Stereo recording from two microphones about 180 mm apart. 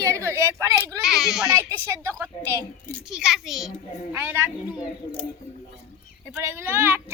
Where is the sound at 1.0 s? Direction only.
Centre (ahead or behind).